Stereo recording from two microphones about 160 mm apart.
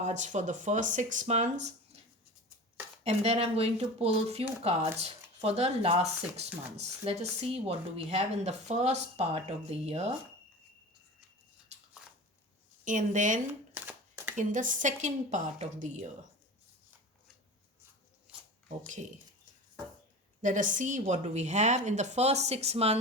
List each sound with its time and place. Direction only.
0.0 s a woman's voice: 50° right (ahead or behind)
3.0 s speech: 40° right (ahead or behind)
11.7 s a sound: 45° right (ahead or behind)
12.8 s a woman's voice: 50° right (ahead or behind)
13.5 s shuffling cards: 10° right (ahead or behind)
14.3 s a woman's voice: 55° right (ahead or behind)
18.3 s a sound: 5° right (ahead or behind)
20.4 s a woman's voice: 55° right (ahead or behind)